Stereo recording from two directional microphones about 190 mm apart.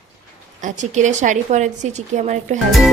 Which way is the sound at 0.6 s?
40° right (ahead or behind).